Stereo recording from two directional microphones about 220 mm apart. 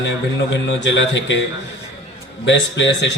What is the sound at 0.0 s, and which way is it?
A man's voice, 55° left (ahead or behind).